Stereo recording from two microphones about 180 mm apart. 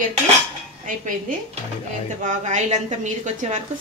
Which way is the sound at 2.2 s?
40° right (ahead or behind).